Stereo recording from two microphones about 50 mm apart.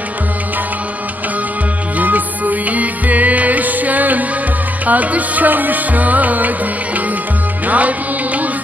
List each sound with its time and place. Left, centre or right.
2.0 s music: right
7.6 s music: right